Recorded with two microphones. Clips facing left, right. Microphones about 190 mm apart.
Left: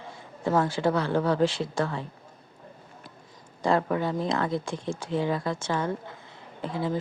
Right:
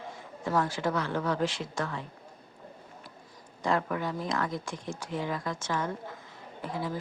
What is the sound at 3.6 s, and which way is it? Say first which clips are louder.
Speech: left 5 dB; 30° left (ahead or behind).